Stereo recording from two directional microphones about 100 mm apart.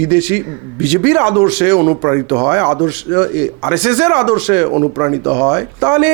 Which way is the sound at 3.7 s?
10° right (ahead or behind).